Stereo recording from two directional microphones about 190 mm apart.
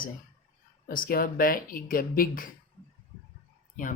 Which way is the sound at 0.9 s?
50° left (ahead or behind).